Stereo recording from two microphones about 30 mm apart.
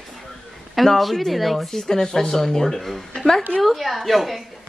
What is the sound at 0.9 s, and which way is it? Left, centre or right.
Speech, centre.